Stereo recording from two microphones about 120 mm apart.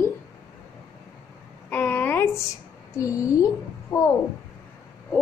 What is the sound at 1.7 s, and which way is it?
A woman's voice, 15° left (ahead or behind).